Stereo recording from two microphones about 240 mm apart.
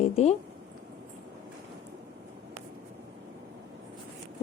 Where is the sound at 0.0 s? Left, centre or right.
Left.